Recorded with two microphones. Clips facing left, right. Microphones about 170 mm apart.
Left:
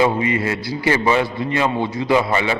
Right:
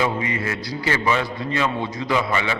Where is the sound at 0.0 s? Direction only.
25° left (ahead or behind).